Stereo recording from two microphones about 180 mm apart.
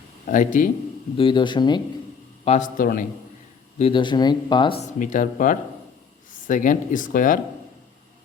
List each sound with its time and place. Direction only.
0.3 s speech: 45° left (ahead or behind)
1.1 s speech: 25° left (ahead or behind)
2.4 s speech: 40° left (ahead or behind)
3.8 s speech: 30° left (ahead or behind)
4.8 s speech: 45° left (ahead or behind)